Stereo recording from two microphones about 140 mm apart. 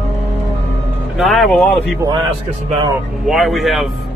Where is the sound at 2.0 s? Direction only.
30° right (ahead or behind).